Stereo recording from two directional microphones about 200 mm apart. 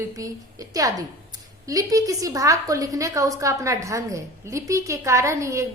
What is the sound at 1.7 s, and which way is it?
A woman's voice, 15° right (ahead or behind).